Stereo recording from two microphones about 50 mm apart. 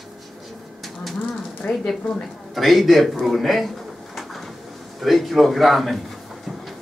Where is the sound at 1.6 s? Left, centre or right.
Left.